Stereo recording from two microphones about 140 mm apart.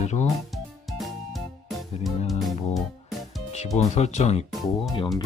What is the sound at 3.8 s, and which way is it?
Speech, 55° left (ahead or behind).